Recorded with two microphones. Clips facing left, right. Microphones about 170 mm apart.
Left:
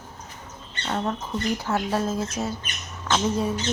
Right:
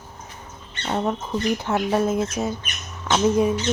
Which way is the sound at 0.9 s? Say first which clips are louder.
Right 3 dB; 15° right (ahead or behind).